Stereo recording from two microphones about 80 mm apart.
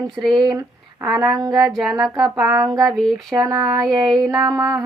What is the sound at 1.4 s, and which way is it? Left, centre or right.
Speech, right.